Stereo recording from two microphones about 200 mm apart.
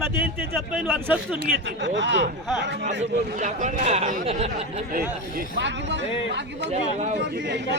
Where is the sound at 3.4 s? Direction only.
40° right (ahead or behind).